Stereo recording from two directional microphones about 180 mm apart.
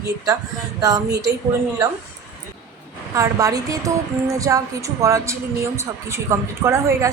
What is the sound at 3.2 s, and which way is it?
Speech, 20° right (ahead or behind).